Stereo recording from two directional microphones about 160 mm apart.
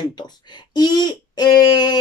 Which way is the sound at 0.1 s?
25° left (ahead or behind).